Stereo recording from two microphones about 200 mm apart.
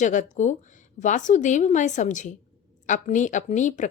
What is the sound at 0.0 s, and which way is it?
A woman's voice, 40° left (ahead or behind).